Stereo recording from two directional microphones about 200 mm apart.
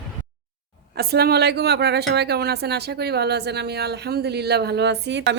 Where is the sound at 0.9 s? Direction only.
50° right (ahead or behind).